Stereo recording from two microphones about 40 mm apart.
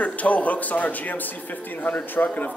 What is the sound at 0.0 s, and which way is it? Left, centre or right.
A man's voice, left.